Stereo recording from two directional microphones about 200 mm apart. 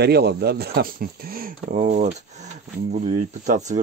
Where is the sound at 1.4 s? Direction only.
40° right (ahead or behind).